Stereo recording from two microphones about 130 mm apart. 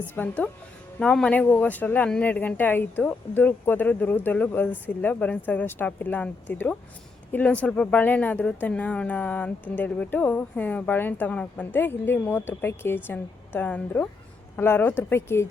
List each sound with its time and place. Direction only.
0.2 s speech: 10° left (ahead or behind)